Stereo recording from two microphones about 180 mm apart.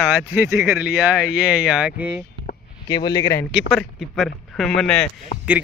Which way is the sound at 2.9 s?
20° left (ahead or behind).